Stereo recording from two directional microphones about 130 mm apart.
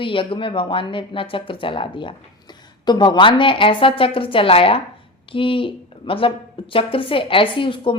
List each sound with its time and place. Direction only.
0.0 s a woman's voice: 40° left (ahead or behind)